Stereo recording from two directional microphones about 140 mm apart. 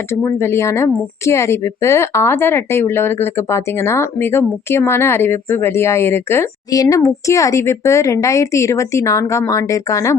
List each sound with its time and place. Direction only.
0.1 s a woman's voice: 20° left (ahead or behind)